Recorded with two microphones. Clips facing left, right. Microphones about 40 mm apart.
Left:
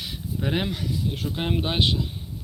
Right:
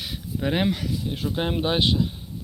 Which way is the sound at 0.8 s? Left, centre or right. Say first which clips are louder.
Right 1 dB; right.